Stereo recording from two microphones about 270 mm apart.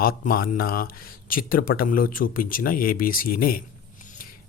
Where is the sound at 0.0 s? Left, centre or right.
Left.